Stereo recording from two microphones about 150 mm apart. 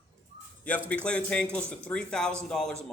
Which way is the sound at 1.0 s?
5° left (ahead or behind).